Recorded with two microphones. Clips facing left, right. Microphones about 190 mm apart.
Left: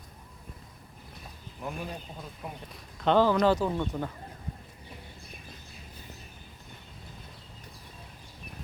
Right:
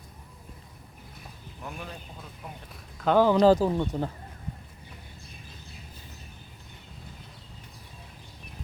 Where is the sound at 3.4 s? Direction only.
35° right (ahead or behind).